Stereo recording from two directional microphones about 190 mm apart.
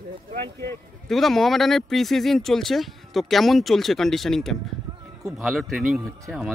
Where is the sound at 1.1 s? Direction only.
Centre (ahead or behind).